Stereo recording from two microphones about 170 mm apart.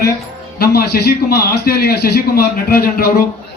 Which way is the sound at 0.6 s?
65° left (ahead or behind).